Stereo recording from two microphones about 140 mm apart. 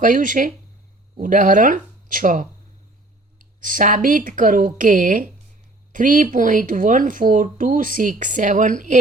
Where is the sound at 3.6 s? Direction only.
70° right (ahead or behind).